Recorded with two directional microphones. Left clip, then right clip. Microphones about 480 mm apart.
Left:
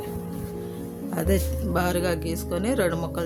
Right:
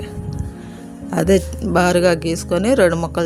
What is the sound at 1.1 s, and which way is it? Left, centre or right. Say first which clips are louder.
Speech: right 10 dB; left.